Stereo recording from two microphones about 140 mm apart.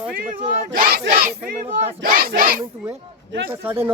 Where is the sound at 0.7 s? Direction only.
90° right.